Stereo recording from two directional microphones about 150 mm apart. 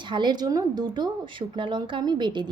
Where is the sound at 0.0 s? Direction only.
30° right (ahead or behind).